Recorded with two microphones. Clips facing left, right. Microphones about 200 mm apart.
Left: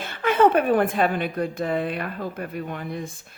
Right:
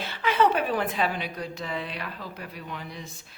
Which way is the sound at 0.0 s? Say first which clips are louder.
Left 5 dB; 50° left (ahead or behind).